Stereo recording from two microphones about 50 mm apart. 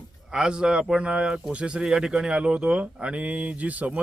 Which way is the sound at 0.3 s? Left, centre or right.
Centre.